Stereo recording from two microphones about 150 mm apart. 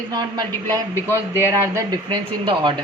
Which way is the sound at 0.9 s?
15° left (ahead or behind).